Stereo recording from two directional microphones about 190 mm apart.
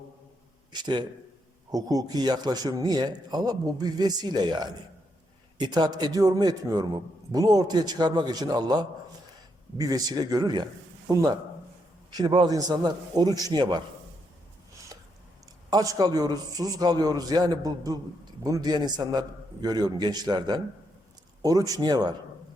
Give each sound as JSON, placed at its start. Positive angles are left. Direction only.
{"t": 0.7, "sound": "a man's voice", "side_deg": -25}
{"t": 15.7, "sound": "a man's voice", "side_deg": -20}